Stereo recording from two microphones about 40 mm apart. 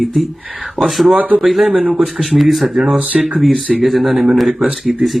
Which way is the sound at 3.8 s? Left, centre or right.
Centre.